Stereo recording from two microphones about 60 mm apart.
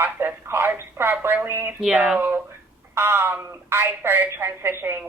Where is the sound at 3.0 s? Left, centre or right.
Right.